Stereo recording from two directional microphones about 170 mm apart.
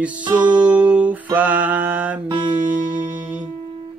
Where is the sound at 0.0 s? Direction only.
10° right (ahead or behind).